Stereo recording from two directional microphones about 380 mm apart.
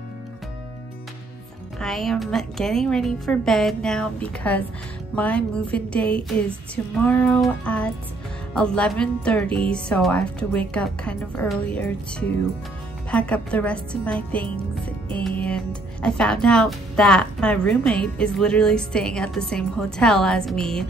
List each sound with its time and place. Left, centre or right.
1.8 s speech: centre